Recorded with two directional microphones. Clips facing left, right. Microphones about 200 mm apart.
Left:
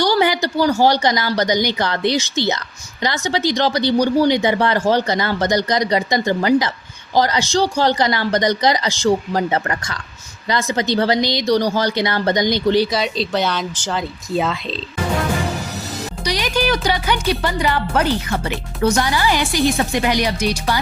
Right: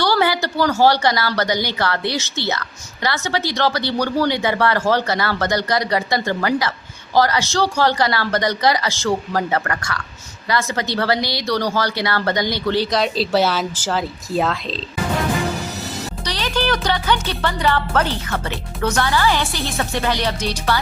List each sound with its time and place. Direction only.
0.0 s a woman's voice: 15° left (ahead or behind)
12.9 s a woman's voice: centre (ahead or behind)
16.2 s a woman's voice: 15° left (ahead or behind)